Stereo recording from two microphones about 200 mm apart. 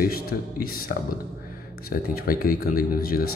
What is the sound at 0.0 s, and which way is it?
A man's voice, 50° left (ahead or behind).